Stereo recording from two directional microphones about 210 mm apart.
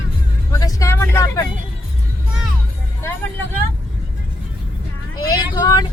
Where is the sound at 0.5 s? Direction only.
15° left (ahead or behind).